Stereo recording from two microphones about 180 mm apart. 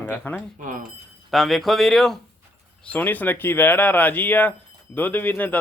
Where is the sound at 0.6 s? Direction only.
50° right (ahead or behind).